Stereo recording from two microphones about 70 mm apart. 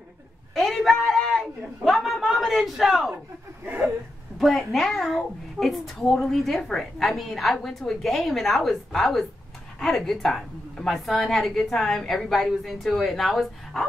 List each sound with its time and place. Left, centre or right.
0.6 s a sound: centre
3.6 s chuckle: right
4.4 s a child's voice: centre